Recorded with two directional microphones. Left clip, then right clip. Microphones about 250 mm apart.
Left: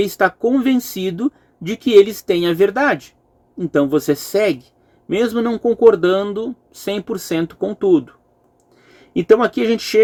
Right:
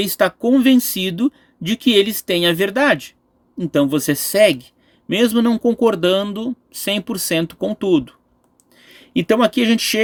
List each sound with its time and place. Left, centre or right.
0.0 s speech: right